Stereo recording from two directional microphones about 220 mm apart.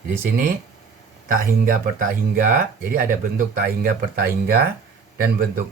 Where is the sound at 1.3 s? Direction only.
40° right (ahead or behind).